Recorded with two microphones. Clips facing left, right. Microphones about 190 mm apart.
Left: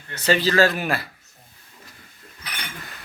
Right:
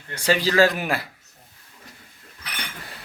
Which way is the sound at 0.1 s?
10° right (ahead or behind).